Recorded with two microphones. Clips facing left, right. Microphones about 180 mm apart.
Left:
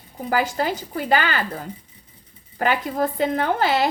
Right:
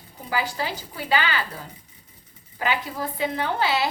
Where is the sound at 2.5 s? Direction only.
50° left (ahead or behind).